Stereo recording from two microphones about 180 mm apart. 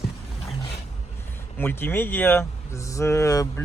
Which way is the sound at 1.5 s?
10° left (ahead or behind).